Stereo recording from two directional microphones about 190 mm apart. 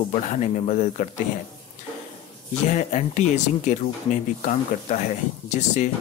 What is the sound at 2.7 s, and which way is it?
Speech, 40° left (ahead or behind).